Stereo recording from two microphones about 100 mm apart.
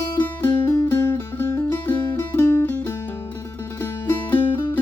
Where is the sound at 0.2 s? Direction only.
20° left (ahead or behind).